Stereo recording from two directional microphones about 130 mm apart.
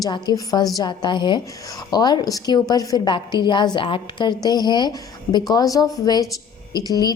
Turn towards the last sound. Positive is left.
turn(degrees=30)  # may be behind; listen again after turning